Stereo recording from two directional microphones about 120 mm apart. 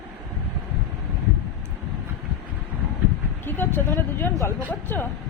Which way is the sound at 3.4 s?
20° left (ahead or behind).